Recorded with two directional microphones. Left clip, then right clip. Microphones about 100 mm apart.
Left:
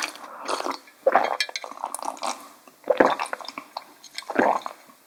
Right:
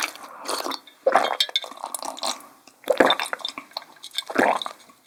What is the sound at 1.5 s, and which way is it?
Chink, centre (ahead or behind).